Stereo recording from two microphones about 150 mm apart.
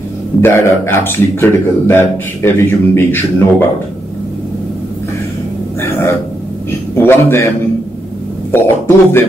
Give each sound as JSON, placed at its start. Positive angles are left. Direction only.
{"t": 0.4, "sound": "a man's voice", "side_deg": 15}
{"t": 7.0, "sound": "a man's voice", "side_deg": 15}